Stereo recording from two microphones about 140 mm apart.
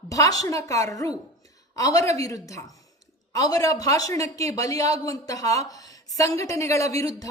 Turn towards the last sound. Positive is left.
turn(degrees=25)  # may be behind; listen again after turning